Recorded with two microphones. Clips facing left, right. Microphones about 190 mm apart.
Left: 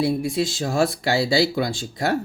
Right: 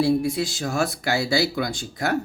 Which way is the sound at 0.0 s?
25° left (ahead or behind).